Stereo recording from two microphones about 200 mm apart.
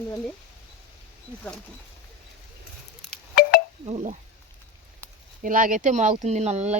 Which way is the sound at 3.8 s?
35° right (ahead or behind).